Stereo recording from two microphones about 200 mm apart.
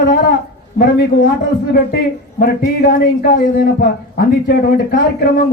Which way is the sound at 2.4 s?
45° left (ahead or behind).